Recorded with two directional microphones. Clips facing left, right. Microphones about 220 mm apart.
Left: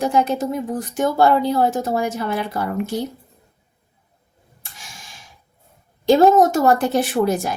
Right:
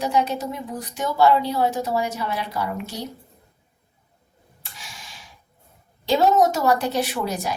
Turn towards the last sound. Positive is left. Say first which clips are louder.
# left 7 dB
turn(degrees=50)  # may be behind; listen again after turning